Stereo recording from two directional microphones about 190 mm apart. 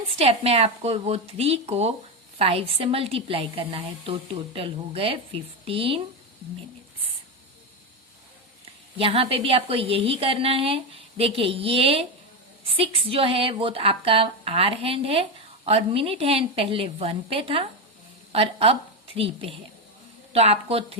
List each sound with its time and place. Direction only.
0.2 s a woman's voice: 30° right (ahead or behind)
9.0 s a woman's voice: 30° right (ahead or behind)